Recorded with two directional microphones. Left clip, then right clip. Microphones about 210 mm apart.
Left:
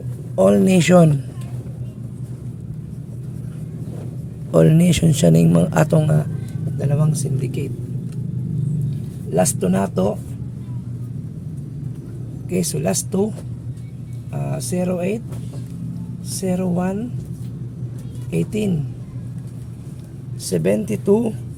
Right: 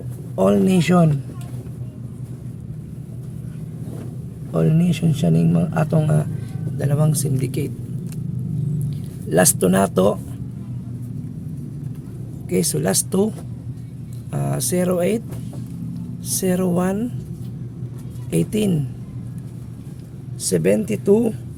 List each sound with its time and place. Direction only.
0.3 s speech: centre (ahead or behind)
4.5 s a man's voice: 20° left (ahead or behind)
6.0 s a man's voice: centre (ahead or behind)
6.7 s speech: 15° right (ahead or behind)
9.3 s speech: 30° right (ahead or behind)
12.5 s speech: 15° right (ahead or behind)
14.3 s speech: 30° right (ahead or behind)
16.4 s speech: 30° right (ahead or behind)
18.3 s a woman's voice: 25° right (ahead or behind)
20.4 s speech: 10° right (ahead or behind)